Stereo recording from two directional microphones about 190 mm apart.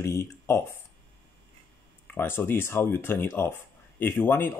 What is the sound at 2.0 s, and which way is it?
Speech, 10° left (ahead or behind).